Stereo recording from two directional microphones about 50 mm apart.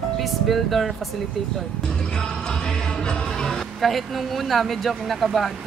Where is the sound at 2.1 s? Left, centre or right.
Centre.